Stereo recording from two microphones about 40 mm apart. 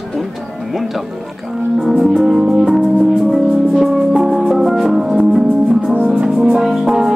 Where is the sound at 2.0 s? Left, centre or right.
Centre.